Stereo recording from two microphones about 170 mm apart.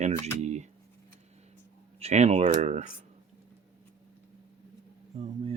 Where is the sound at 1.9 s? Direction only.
40° right (ahead or behind).